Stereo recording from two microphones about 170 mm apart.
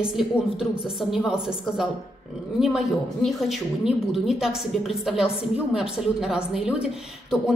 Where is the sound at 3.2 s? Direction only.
Centre (ahead or behind).